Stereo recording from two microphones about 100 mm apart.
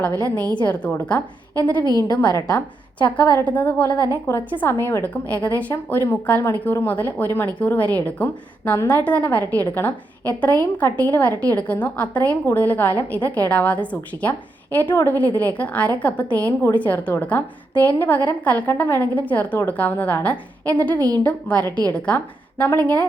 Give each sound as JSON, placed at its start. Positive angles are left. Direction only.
{"t": 0.2, "sound": "a woman's voice", "side_deg": 15}
{"t": 1.8, "sound": "a woman's voice", "side_deg": -40}
{"t": 2.3, "sound": "speech", "side_deg": 30}
{"t": 3.4, "sound": "a woman's voice", "side_deg": 15}
{"t": 5.3, "sound": "a woman's voice", "side_deg": 15}